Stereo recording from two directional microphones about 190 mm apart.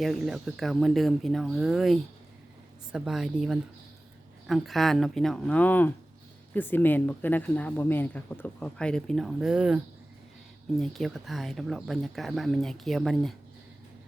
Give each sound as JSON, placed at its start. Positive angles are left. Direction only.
{"t": 0.0, "sound": "speech", "side_deg": 0}